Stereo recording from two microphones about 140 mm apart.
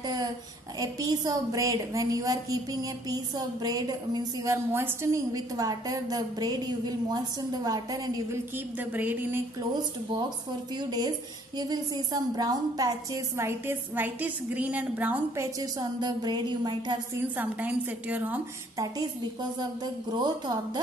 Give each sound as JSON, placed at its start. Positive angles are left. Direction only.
{"t": 0.0, "sound": "a sound", "side_deg": -30}
{"t": 0.7, "sound": "a woman's voice", "side_deg": -25}
{"t": 8.7, "sound": "a woman's voice", "side_deg": -10}
{"t": 10.8, "sound": "a woman's voice", "side_deg": -30}
{"t": 17.1, "sound": "a woman's voice", "side_deg": -10}
{"t": 19.8, "sound": "a woman's voice", "side_deg": -30}